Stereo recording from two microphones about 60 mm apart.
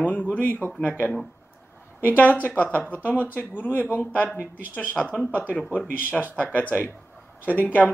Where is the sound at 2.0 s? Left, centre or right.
Left.